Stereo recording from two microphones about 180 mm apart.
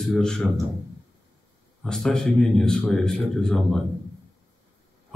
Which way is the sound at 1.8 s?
5° left (ahead or behind).